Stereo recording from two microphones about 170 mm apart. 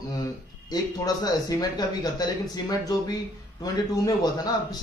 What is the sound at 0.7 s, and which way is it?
A man's voice, 20° left (ahead or behind).